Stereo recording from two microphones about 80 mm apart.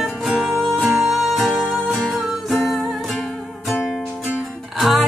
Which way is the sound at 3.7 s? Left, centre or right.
Left.